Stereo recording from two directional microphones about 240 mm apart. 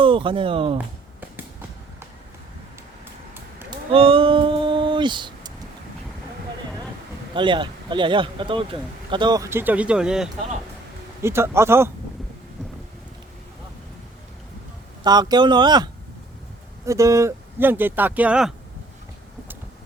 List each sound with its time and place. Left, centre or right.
0.0 s speech: right
3.6 s a sound: right
7.3 s speech: centre
15.0 s speech: centre